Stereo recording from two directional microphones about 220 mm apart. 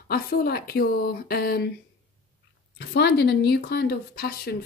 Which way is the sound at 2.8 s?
50° left (ahead or behind).